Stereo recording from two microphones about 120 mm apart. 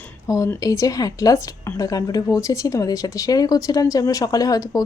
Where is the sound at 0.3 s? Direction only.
30° left (ahead or behind).